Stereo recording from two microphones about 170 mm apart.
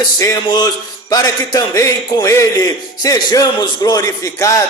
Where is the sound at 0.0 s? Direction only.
20° left (ahead or behind).